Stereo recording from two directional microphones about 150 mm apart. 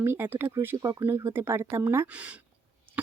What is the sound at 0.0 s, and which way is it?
Speech, 15° right (ahead or behind).